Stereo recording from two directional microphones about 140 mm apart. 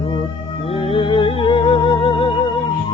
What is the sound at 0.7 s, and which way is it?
Music, 40° left (ahead or behind).